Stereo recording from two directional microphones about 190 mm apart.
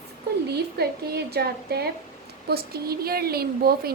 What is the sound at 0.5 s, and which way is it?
A woman's voice, 55° right (ahead or behind).